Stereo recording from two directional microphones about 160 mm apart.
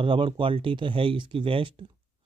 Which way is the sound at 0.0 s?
30° right (ahead or behind).